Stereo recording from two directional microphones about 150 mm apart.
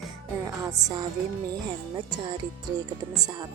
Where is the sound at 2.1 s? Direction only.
30° right (ahead or behind).